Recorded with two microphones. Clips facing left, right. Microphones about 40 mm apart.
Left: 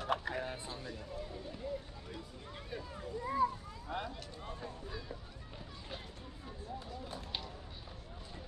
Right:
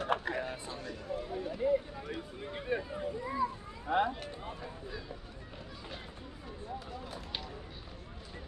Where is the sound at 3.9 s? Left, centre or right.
Right.